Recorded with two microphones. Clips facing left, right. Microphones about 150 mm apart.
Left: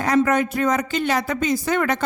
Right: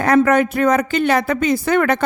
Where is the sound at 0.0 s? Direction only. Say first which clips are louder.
Right 5 dB; 60° right (ahead or behind).